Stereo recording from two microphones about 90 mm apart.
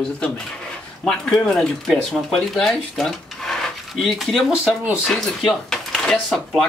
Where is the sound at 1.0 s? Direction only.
10° left (ahead or behind).